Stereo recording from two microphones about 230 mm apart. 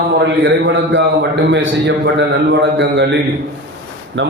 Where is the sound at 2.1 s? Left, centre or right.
Right.